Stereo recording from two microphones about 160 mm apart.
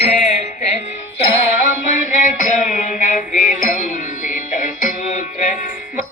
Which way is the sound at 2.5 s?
50° left (ahead or behind).